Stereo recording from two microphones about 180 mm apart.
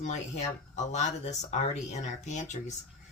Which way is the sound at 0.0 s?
40° left (ahead or behind).